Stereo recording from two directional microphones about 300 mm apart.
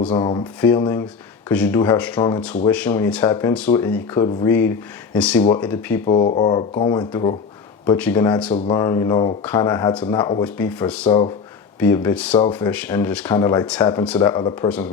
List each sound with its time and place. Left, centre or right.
0.1 s speech: centre
6.1 s speech: centre